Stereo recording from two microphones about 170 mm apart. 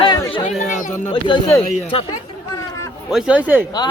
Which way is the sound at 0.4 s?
50° left (ahead or behind).